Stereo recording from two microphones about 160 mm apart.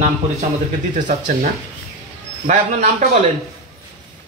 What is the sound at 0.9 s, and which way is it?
Speech, 55° right (ahead or behind).